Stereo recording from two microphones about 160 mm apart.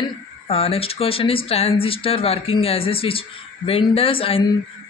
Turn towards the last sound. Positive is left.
turn(degrees=35)  # may be behind; listen again after turning